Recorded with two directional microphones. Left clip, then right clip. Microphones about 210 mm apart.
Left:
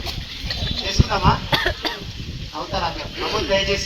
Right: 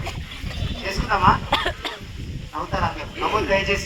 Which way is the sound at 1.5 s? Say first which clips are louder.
Left 2 dB; 35° left (ahead or behind).